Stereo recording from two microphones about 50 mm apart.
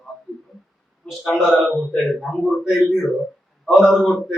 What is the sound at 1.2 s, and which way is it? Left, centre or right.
A man's voice, centre.